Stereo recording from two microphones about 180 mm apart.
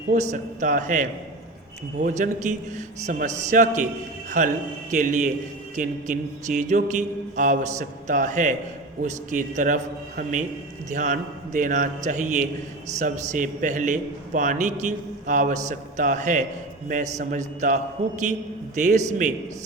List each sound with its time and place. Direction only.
0.1 s a man's voice: 45° right (ahead or behind)